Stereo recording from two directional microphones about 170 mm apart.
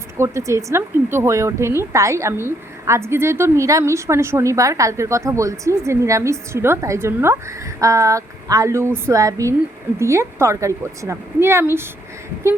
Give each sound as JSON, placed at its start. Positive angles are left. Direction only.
{"t": 0.2, "sound": "speech", "side_deg": -15}